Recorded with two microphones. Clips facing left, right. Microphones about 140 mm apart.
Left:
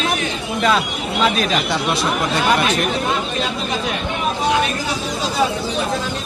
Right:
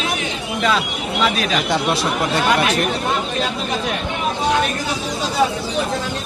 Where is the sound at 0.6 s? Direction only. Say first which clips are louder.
Left 2 dB; 40° left (ahead or behind).